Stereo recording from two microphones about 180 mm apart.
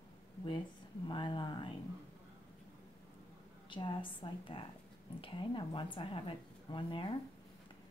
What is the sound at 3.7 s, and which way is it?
Speech, 25° left (ahead or behind).